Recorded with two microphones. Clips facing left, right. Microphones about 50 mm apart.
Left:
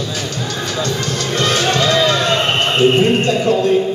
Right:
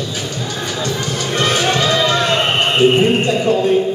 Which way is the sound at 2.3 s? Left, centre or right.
Centre.